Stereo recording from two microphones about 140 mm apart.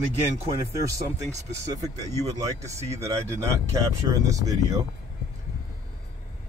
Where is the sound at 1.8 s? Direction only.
25° right (ahead or behind).